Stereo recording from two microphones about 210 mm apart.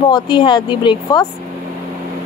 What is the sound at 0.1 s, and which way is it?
Speech, 20° left (ahead or behind).